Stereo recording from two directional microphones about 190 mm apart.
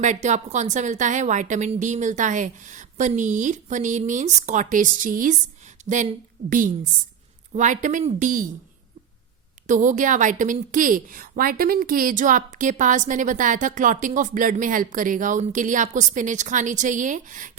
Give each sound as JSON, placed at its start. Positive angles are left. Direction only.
{"t": 0.0, "sound": "a woman's voice", "side_deg": -40}
{"t": 9.6, "sound": "speech", "side_deg": -40}